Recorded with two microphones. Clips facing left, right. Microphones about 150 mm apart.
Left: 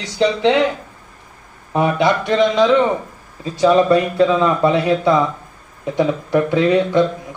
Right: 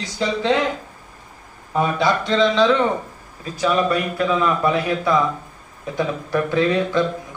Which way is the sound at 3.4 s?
25° left (ahead or behind).